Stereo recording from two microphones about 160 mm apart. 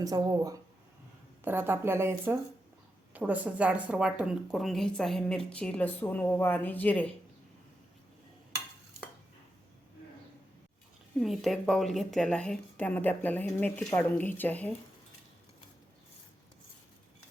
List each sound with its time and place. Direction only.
0.0 s speech: 20° right (ahead or behind); by 7.1 s 10° left (ahead or behind)
11.2 s a woman's voice: centre (ahead or behind)